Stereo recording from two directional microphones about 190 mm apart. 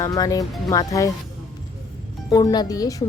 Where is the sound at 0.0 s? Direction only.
15° left (ahead or behind).